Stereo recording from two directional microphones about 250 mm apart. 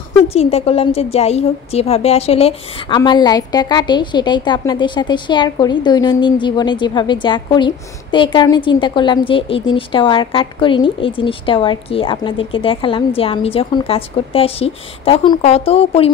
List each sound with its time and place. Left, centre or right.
0.3 s a woman's voice: left